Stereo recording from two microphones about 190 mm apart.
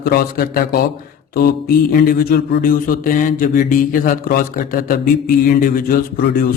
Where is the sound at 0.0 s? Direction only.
50° left (ahead or behind).